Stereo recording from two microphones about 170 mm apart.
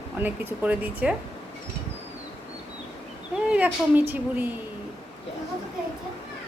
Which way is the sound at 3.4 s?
10° right (ahead or behind).